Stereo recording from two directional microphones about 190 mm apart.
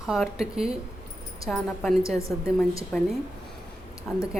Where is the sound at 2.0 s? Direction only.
15° left (ahead or behind).